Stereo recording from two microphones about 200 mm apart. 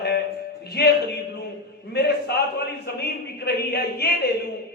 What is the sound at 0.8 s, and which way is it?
Speech, 55° left (ahead or behind).